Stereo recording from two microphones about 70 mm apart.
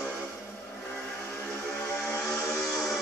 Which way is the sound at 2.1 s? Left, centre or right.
Left.